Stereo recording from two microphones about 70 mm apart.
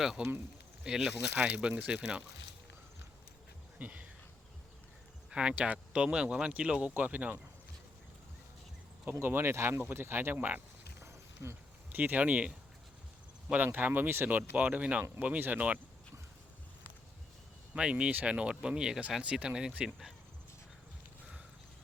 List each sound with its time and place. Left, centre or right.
0.0 s speech: centre
3.8 s a sound: right
5.3 s speech: centre
9.2 s speech: right
11.0 s a sound: right
11.9 s speech: right
13.7 s speech: right
17.7 s speech: centre